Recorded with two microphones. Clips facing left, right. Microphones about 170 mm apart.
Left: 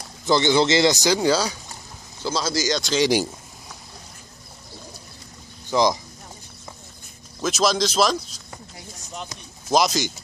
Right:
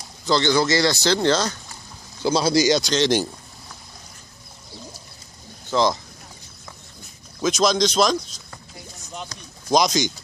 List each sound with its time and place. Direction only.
0.2 s speech: 20° left (ahead or behind)
2.2 s speech: 15° right (ahead or behind)
2.8 s speech: 5° left (ahead or behind)
5.7 s speech: 15° left (ahead or behind)
7.4 s speech: 5° left (ahead or behind)
9.7 s speech: 5° left (ahead or behind)